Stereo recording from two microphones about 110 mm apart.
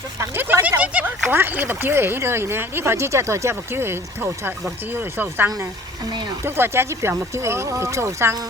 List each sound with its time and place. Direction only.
0.2 s a sound: 20° right (ahead or behind)
0.8 s speech: 15° right (ahead or behind)
6.1 s speech: 40° right (ahead or behind)
6.4 s speech: 20° right (ahead or behind)